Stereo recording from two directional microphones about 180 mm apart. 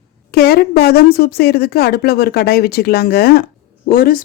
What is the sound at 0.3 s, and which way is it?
Speech, 60° left (ahead or behind).